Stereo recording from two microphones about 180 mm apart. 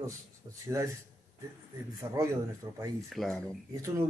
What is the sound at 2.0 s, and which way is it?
Speech, 15° right (ahead or behind).